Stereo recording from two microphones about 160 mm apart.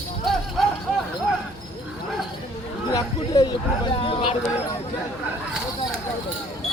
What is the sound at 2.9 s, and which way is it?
Speech, 25° left (ahead or behind).